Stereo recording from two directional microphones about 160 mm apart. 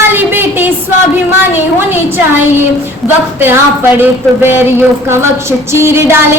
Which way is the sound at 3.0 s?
10° right (ahead or behind).